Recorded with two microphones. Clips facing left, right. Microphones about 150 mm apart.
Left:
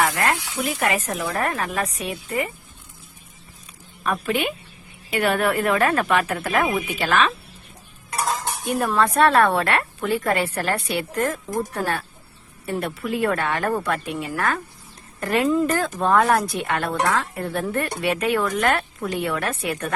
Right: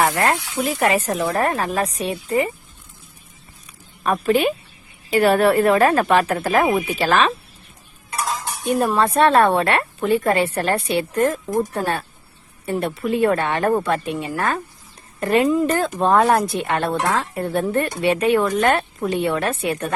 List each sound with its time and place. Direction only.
0.0 s speech: 25° right (ahead or behind)
4.0 s speech: 35° right (ahead or behind)
8.8 s a woman's voice: 20° right (ahead or behind)